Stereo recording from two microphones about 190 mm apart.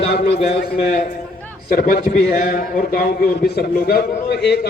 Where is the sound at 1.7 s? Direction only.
50° left (ahead or behind).